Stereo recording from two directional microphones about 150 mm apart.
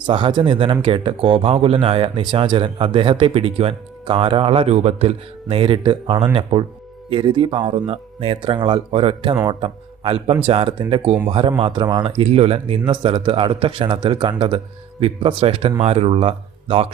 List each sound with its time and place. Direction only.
0.0 s a man's voice: 30° right (ahead or behind)